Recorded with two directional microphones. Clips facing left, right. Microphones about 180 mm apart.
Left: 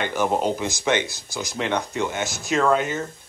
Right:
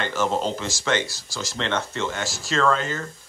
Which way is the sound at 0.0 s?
15° left (ahead or behind).